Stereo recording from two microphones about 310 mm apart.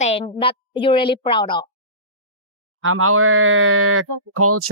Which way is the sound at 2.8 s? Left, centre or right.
Right.